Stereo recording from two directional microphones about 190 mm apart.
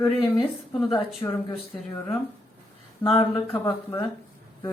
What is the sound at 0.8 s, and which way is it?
Speech, centre (ahead or behind).